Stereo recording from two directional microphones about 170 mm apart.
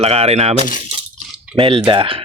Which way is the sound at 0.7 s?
50° left (ahead or behind).